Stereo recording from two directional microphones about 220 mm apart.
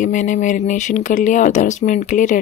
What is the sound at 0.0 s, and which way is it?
Speech, 35° left (ahead or behind).